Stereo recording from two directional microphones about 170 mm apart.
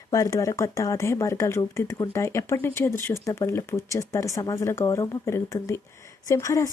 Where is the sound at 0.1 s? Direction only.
20° left (ahead or behind).